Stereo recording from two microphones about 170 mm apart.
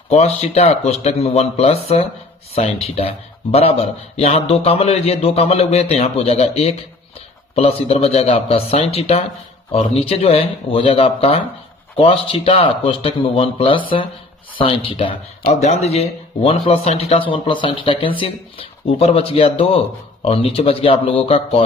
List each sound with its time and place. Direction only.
0.1 s speech: 40° left (ahead or behind)